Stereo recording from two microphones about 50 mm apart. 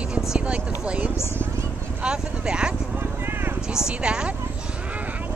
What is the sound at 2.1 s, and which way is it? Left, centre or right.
Speech, centre.